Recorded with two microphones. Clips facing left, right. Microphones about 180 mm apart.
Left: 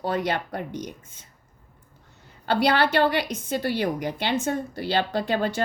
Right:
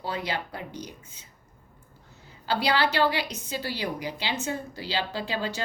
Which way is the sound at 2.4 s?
55° left (ahead or behind).